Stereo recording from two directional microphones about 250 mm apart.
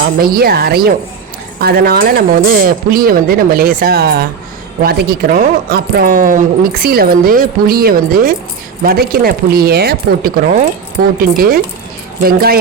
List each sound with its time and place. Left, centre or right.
0.2 s speech: right